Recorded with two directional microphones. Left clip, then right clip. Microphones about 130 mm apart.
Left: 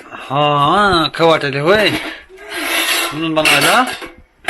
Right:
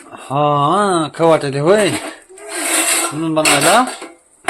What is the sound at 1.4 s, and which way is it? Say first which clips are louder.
Speech: left 1 dB; 40° right (ahead or behind).